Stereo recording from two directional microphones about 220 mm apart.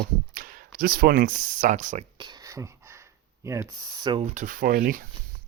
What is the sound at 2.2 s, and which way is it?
Speech, 20° right (ahead or behind).